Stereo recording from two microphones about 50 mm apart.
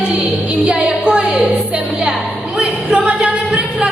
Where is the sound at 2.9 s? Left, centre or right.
Right.